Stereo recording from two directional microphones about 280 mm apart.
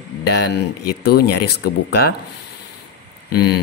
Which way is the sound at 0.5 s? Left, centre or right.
Left.